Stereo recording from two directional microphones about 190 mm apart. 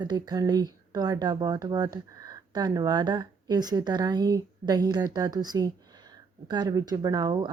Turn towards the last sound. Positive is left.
turn(degrees=-20)  # may be behind; listen again after turning